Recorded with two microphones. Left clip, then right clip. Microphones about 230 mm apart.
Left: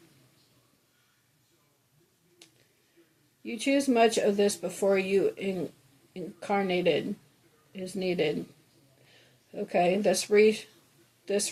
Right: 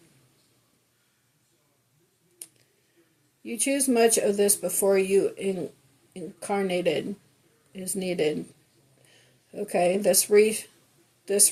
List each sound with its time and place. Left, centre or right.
2.4 s tick-tock: right
3.4 s speech: right
9.5 s speech: right